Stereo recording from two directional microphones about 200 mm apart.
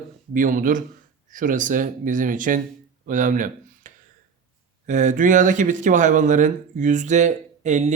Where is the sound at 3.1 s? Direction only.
40° right (ahead or behind).